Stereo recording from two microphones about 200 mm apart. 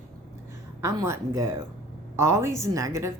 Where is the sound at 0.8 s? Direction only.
15° right (ahead or behind).